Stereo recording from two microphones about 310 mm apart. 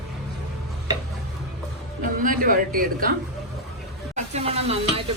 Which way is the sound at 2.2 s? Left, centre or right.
Right.